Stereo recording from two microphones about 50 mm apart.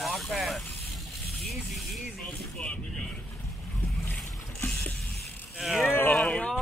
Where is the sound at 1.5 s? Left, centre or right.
Centre.